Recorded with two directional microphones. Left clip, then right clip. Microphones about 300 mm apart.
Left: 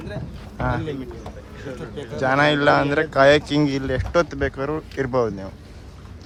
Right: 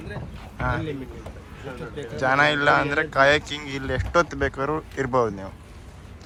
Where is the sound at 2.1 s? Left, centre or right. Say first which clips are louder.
Left 1 dB; centre.